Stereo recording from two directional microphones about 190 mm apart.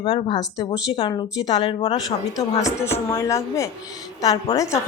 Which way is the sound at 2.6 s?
15° left (ahead or behind).